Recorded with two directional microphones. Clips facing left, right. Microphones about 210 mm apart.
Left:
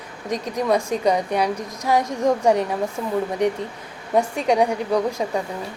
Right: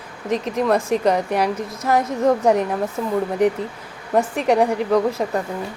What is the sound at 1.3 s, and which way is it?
Speech, 5° right (ahead or behind).